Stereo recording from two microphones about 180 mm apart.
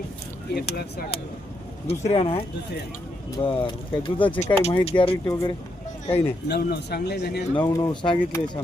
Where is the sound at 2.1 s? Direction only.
30° left (ahead or behind).